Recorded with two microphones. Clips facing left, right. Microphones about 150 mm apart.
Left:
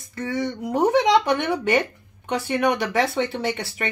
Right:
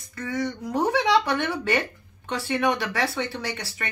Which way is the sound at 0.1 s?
25° left (ahead or behind).